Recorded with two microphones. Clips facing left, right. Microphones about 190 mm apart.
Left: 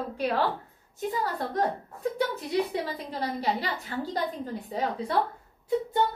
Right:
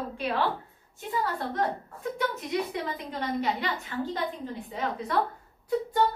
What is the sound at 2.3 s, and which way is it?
A woman's voice, 35° left (ahead or behind).